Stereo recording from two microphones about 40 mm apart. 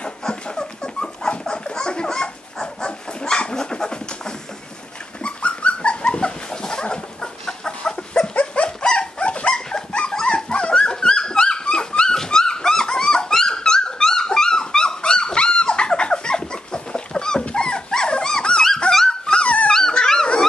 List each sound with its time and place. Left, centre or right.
0.0 s a sound: centre
5.2 s dog: left
18.9 s dog: centre
19.3 s dog: left
19.7 s dog: centre